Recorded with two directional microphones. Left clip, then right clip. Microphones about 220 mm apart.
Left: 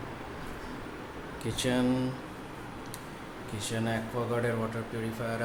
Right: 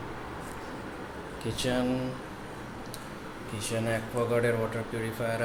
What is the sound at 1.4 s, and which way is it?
Speech, 30° left (ahead or behind).